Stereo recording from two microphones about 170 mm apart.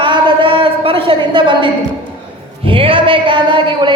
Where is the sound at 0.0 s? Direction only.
30° right (ahead or behind).